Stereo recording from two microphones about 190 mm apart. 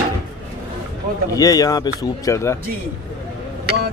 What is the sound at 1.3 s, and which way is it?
Speech, 20° left (ahead or behind).